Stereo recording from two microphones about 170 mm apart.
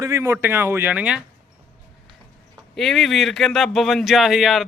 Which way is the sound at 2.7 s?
Centre (ahead or behind).